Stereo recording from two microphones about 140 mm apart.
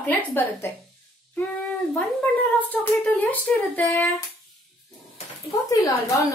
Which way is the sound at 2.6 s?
10° left (ahead or behind).